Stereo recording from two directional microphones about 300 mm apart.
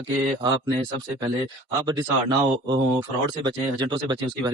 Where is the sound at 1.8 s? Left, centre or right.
Centre.